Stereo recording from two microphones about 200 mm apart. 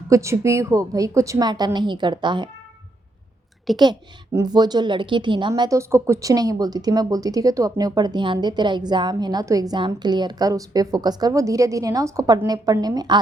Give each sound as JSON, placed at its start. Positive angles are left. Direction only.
{"t": 0.1, "sound": "a woman's voice", "side_deg": -15}
{"t": 3.8, "sound": "a woman's voice", "side_deg": -15}